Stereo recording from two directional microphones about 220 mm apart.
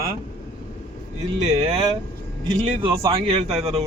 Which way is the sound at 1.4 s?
25° right (ahead or behind).